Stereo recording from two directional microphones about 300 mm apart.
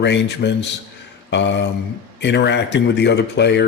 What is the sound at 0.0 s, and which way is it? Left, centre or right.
Speech, left.